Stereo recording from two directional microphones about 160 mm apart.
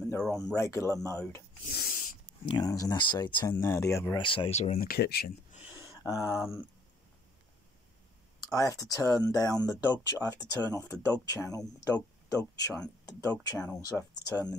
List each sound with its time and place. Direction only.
0.2 s speech: 5° left (ahead or behind)
0.6 s a man's voice: 15° left (ahead or behind)
1.7 s speech: 70° left (ahead or behind)
2.4 s speech: 25° left (ahead or behind)
4.2 s speech: 30° left (ahead or behind)
4.8 s speech: 75° left (ahead or behind)
6.0 s a man's voice: 20° left (ahead or behind)
8.5 s speech: 20° left (ahead or behind)